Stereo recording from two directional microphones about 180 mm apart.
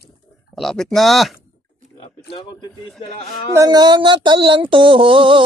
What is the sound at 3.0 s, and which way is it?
Speech, 35° left (ahead or behind).